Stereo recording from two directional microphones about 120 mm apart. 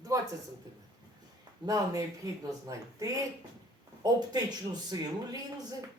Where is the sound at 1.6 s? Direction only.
30° right (ahead or behind).